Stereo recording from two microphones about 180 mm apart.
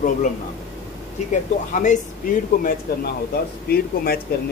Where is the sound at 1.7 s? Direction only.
45° left (ahead or behind).